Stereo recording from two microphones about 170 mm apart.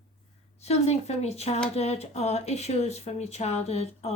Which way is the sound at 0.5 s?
40° left (ahead or behind).